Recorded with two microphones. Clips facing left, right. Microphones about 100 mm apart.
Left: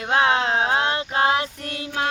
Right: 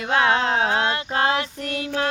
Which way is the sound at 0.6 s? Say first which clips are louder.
Even; 25° left (ahead or behind).